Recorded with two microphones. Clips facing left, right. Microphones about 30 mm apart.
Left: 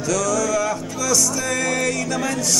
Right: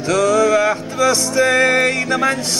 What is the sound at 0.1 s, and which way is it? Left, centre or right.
Music, right.